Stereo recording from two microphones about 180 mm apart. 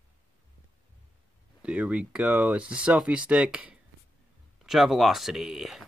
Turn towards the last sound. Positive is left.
turn(degrees=0)  # may be behind; listen again after turning